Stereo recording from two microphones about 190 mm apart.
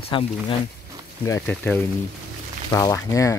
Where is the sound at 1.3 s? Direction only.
10° left (ahead or behind).